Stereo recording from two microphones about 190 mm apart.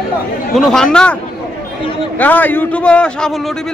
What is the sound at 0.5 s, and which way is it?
Speech, centre (ahead or behind).